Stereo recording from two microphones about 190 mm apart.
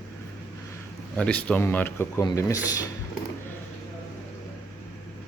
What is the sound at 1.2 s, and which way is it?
Speech, 5° left (ahead or behind).